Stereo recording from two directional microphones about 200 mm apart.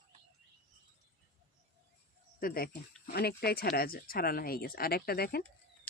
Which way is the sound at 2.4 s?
45° left (ahead or behind).